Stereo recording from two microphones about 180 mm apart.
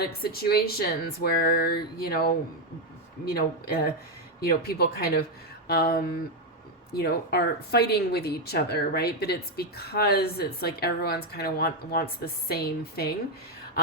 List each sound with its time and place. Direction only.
0.0 s speech: 60° left (ahead or behind)